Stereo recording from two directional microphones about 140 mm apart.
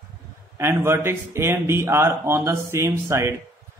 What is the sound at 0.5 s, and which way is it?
A man's voice, 20° right (ahead or behind).